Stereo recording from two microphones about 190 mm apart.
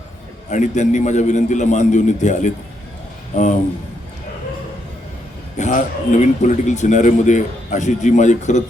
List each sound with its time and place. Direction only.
0.5 s a man's voice: 40° left (ahead or behind)
5.5 s a man's voice: 40° left (ahead or behind)